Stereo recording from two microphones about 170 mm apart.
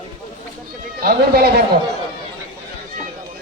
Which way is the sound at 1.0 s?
65° right (ahead or behind).